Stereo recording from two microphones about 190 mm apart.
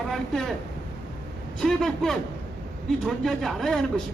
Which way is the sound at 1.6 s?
Centre (ahead or behind).